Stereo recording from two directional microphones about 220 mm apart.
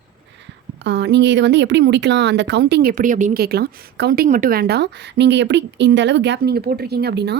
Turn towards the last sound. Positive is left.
turn(degrees=-50)  # may be behind; listen again after turning